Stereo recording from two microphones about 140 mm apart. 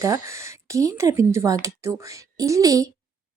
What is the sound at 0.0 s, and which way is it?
Speech, 20° right (ahead or behind).